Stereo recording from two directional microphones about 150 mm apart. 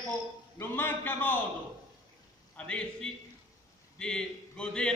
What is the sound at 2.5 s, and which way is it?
A man's voice, 5° left (ahead or behind).